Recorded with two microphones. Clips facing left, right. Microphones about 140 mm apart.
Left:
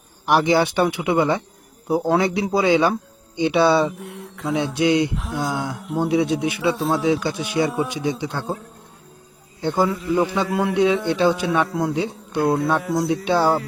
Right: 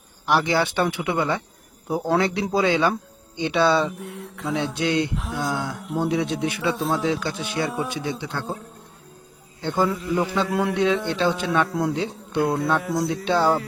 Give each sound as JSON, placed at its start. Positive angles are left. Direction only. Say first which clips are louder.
{"t": 0.3, "sound": "speech", "louder": "left 4 dB", "side_deg": 15}
{"t": 3.9, "sound": "a man's voice", "louder": "even", "side_deg": 0}
{"t": 4.5, "sound": "speech", "louder": "left 4 dB", "side_deg": 10}
{"t": 5.1, "sound": "a man's voice", "louder": "left 2 dB", "side_deg": 0}
{"t": 9.6, "sound": "a man's voice", "louder": "left 2 dB", "side_deg": 10}